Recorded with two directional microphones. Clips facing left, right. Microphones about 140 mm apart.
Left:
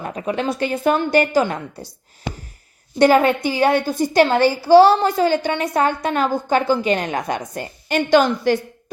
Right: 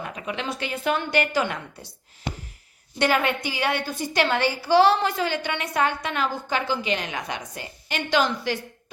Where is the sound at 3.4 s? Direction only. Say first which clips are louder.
Left 9 dB; 45° left (ahead or behind).